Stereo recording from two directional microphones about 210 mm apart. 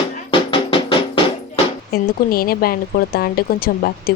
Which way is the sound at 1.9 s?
45° left (ahead or behind).